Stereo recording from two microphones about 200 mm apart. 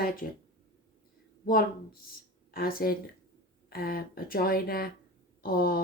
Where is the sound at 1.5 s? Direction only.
45° left (ahead or behind).